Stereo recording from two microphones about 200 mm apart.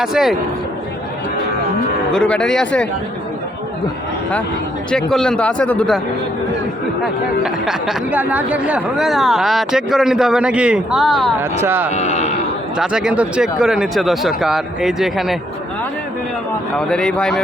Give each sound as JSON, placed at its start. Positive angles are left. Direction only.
{"t": 0.0, "sound": "speech", "side_deg": 0}
{"t": 2.1, "sound": "speech", "side_deg": 5}
{"t": 4.9, "sound": "speech", "side_deg": 5}
{"t": 7.0, "sound": "speech", "side_deg": 0}
{"t": 11.6, "sound": "speech", "side_deg": -10}
{"t": 11.9, "sound": "speech", "side_deg": 35}
{"t": 12.7, "sound": "speech", "side_deg": -5}
{"t": 16.7, "sound": "speech", "side_deg": 5}